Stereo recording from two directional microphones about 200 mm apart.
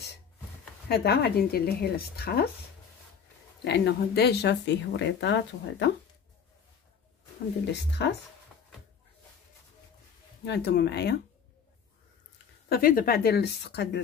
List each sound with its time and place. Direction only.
0.8 s speech: 55° left (ahead or behind)
3.6 s speech: 55° left (ahead or behind)
8.0 s speech: 60° left (ahead or behind)
10.4 s speech: 55° left (ahead or behind)
12.6 s speech: 50° left (ahead or behind)